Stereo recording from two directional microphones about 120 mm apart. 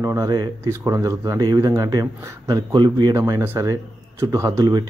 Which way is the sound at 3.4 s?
15° right (ahead or behind).